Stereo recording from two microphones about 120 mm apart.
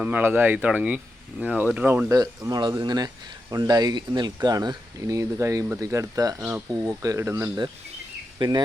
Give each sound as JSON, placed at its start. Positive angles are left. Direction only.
{"t": 0.0, "sound": "speech", "side_deg": -15}
{"t": 2.0, "sound": "speech", "side_deg": -30}